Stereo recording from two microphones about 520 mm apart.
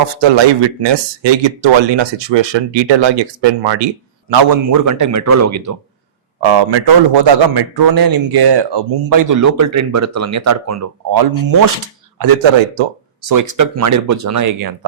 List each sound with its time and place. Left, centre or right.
0.2 s speech: right
4.9 s a man's voice: right
6.4 s a man's voice: right
12.2 s speech: right
13.2 s a man's voice: right